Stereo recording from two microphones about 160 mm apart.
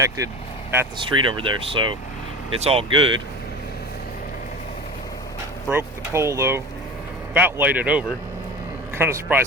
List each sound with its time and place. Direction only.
0.2 s speech: 20° right (ahead or behind)
1.2 s speech: 30° right (ahead or behind)
5.6 s speech: 15° right (ahead or behind)